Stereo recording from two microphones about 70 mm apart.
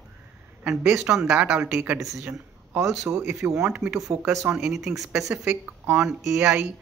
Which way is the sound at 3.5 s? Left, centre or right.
Centre.